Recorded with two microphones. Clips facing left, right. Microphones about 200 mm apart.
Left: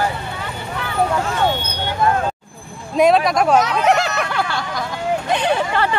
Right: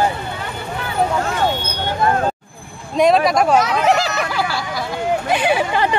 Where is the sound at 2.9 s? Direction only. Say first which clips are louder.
Even; centre (ahead or behind).